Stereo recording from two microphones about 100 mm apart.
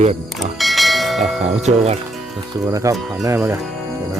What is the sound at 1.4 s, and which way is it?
Cricket, 90° right.